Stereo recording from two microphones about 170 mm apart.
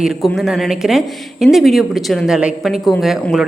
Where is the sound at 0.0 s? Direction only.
Centre (ahead or behind).